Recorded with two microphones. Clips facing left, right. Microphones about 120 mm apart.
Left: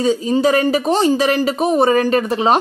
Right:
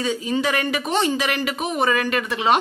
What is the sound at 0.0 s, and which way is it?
Speech, 40° left (ahead or behind).